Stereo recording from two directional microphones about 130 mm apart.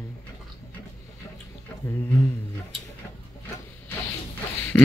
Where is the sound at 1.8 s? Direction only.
20° left (ahead or behind).